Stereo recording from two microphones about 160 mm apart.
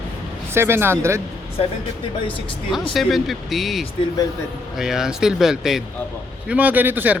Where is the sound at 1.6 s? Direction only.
40° left (ahead or behind).